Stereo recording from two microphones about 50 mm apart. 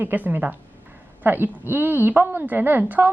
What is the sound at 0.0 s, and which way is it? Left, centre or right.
A woman's voice, right.